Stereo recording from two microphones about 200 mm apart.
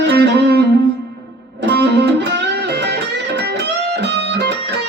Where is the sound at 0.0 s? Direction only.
55° right (ahead or behind).